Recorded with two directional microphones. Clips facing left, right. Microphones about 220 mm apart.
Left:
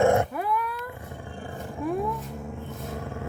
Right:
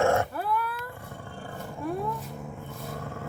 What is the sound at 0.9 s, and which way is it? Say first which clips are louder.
Roar: left 2 dB; 15° left (ahead or behind).